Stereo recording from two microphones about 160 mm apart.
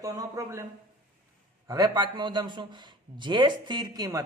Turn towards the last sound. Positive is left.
turn(degrees=-25)  # may be behind; listen again after turning